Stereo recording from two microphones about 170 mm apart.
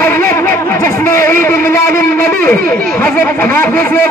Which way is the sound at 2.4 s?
10° left (ahead or behind).